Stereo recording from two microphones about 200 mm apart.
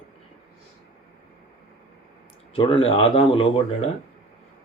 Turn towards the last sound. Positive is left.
turn(degrees=30)  # may be behind; listen again after turning